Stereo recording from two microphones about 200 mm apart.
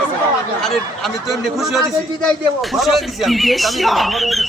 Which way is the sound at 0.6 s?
Centre (ahead or behind).